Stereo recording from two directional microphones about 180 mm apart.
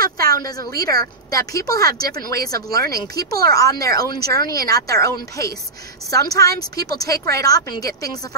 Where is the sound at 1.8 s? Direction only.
55° right (ahead or behind).